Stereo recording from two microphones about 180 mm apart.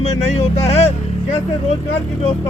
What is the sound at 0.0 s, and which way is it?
Speech, 35° left (ahead or behind).